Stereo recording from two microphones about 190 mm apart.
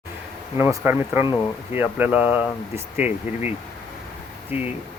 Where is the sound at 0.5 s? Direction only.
10° right (ahead or behind).